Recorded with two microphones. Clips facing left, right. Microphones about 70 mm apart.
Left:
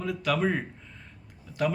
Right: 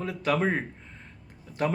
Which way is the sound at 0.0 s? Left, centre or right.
Right.